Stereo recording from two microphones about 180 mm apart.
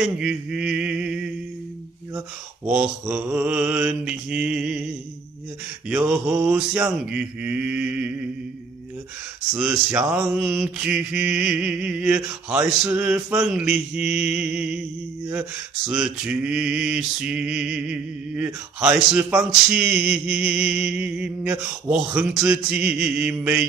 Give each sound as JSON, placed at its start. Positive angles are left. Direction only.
{"t": 0.0, "sound": "mantra", "side_deg": -5}
{"t": 5.9, "sound": "mantra", "side_deg": -10}
{"t": 9.6, "sound": "mantra", "side_deg": -5}
{"t": 15.9, "sound": "mantra", "side_deg": -5}